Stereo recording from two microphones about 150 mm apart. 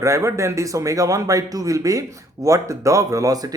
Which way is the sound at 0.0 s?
20° right (ahead or behind).